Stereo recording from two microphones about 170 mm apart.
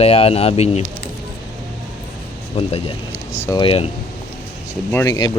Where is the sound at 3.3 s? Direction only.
15° left (ahead or behind).